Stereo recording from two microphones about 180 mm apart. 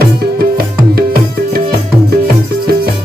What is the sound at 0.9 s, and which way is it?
Tabla, 55° right (ahead or behind).